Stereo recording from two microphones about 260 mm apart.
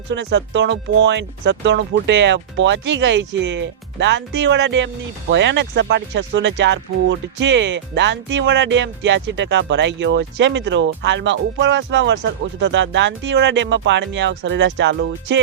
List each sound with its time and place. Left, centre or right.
0.1 s speech: right